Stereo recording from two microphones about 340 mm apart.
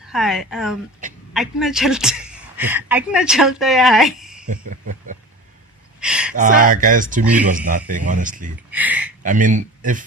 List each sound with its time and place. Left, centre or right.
0.0 s speech: centre
4.4 s cricket: right
6.0 s a sound: centre
6.3 s speech: right
8.7 s speech: centre
9.2 s speech: right